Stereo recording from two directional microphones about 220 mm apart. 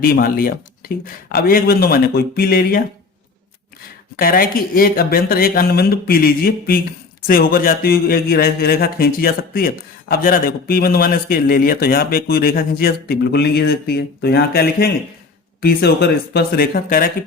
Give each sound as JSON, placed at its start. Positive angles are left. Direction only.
{"t": 0.0, "sound": "speech", "side_deg": 45}
{"t": 4.2, "sound": "speech", "side_deg": 40}